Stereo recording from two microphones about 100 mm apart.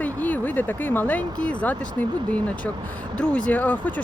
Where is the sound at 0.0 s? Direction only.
15° left (ahead or behind).